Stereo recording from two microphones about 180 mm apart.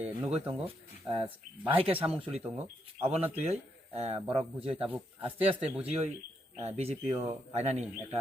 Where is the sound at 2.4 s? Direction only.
10° right (ahead or behind).